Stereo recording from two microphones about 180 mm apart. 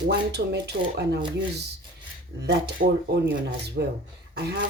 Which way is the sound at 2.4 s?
65° right (ahead or behind).